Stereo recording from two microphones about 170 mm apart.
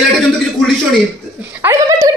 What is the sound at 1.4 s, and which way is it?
Speech, 15° right (ahead or behind).